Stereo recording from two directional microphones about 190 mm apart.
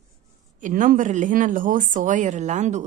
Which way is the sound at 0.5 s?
45° right (ahead or behind).